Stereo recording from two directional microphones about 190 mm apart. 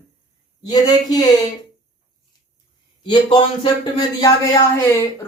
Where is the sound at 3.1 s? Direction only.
25° left (ahead or behind).